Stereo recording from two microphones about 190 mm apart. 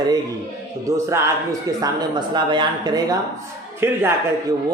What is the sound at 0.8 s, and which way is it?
A woman's voice, 15° right (ahead or behind).